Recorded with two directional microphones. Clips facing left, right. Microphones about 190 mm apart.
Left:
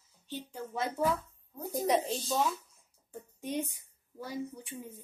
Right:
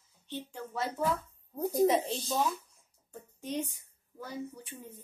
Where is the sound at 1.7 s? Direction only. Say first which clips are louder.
Right 2 dB; centre (ahead or behind).